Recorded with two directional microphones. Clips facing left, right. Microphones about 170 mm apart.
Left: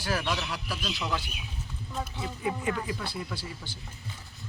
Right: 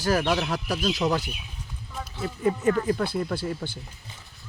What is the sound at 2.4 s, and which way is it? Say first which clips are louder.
Speech: right 8 dB; 45° right (ahead or behind).